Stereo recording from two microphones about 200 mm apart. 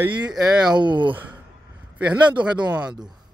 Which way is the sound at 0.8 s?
25° right (ahead or behind).